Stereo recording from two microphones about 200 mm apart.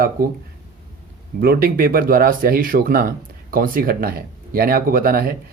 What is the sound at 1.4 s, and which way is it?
Speech, 45° right (ahead or behind).